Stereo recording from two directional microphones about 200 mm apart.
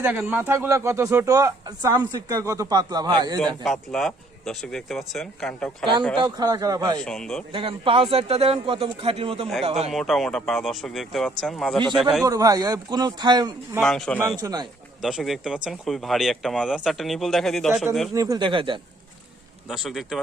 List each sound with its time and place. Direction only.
0.0 s speech: 10° right (ahead or behind)
3.4 s speech: centre (ahead or behind)
6.1 s a man's voice: 20° right (ahead or behind)
7.0 s speech: 5° left (ahead or behind)
7.5 s a man's voice: 25° right (ahead or behind)
9.9 s speech: centre (ahead or behind)
12.2 s a man's voice: 15° right (ahead or behind)
13.8 s speech: 5° left (ahead or behind)
14.4 s a man's voice: 20° right (ahead or behind)
15.0 s speech: centre (ahead or behind)
18.1 s a man's voice: 15° right (ahead or behind)
19.6 s speech: centre (ahead or behind)